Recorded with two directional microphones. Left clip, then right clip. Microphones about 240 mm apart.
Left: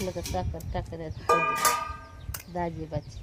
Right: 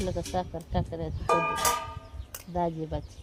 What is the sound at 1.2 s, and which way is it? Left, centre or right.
Music, centre.